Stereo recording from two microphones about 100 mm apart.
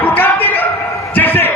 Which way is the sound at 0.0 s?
20° left (ahead or behind).